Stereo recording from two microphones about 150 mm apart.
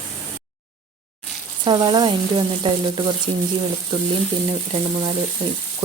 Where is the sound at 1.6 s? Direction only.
30° right (ahead or behind).